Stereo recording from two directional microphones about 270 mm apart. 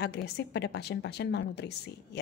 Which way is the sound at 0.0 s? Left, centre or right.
Left.